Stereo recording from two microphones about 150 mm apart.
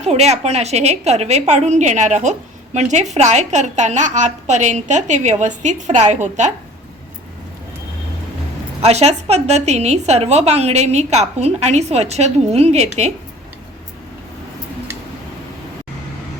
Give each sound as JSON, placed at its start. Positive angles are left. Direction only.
{"t": 0.0, "sound": "a woman's voice", "side_deg": -45}
{"t": 8.8, "sound": "a woman's voice", "side_deg": -45}